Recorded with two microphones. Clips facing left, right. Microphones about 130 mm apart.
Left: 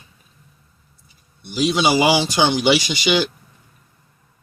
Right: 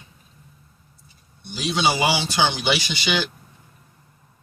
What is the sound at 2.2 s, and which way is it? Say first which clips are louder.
Speech: left 5 dB; 15° left (ahead or behind).